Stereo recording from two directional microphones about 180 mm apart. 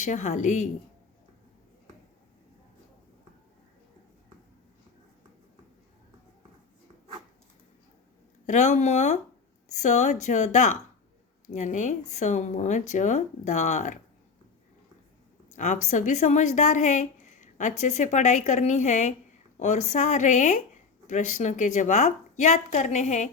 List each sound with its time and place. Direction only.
0.0 s a woman's voice: 40° left (ahead or behind)
8.4 s a woman's voice: 40° left (ahead or behind)
15.4 s a woman's voice: 40° left (ahead or behind)